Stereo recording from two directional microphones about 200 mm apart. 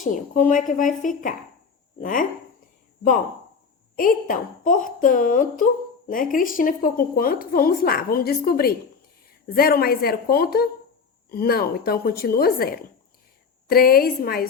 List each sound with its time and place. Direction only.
0.0 s speech: 40° left (ahead or behind)
3.9 s a woman's voice: 45° left (ahead or behind)